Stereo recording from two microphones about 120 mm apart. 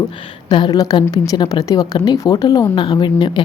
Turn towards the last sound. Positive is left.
turn(degrees=40)  # may be behind; listen again after turning